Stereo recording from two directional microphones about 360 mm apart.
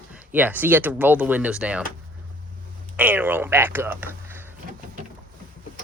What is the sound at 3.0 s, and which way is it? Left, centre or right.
Speech, centre.